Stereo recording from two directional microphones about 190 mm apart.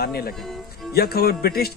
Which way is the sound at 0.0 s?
55° left (ahead or behind).